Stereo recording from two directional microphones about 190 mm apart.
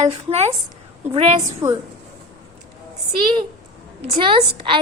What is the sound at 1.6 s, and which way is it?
Speech, 20° right (ahead or behind).